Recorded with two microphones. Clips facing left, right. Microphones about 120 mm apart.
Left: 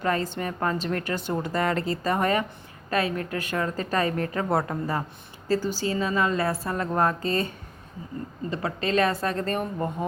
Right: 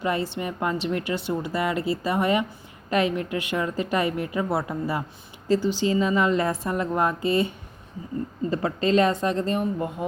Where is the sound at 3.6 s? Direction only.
15° right (ahead or behind).